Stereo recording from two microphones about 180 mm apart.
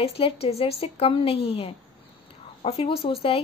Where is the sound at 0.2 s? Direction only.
35° left (ahead or behind).